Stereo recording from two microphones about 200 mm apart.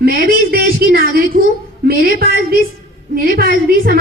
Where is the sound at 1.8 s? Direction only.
50° right (ahead or behind).